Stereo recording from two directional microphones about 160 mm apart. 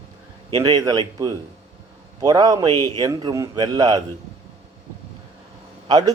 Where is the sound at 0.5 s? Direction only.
25° right (ahead or behind).